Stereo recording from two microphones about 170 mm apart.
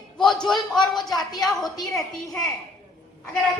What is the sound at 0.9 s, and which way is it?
Speech, 25° left (ahead or behind).